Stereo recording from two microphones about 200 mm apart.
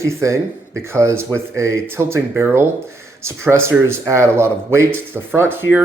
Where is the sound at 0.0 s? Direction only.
15° right (ahead or behind).